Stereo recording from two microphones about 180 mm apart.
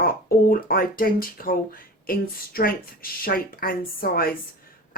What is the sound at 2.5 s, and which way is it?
A woman's voice, 55° left (ahead or behind).